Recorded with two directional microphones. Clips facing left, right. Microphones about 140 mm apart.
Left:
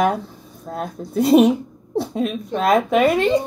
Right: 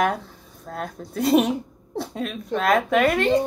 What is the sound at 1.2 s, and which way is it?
Speech, 10° left (ahead or behind).